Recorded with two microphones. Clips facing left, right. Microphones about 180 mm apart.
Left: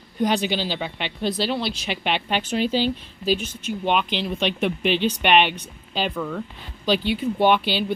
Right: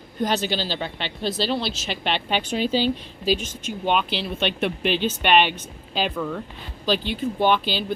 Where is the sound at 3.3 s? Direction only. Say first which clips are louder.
Left 2 dB; 10° left (ahead or behind).